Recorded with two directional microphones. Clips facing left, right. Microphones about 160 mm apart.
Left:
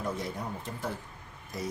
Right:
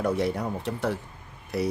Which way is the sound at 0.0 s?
75° right (ahead or behind).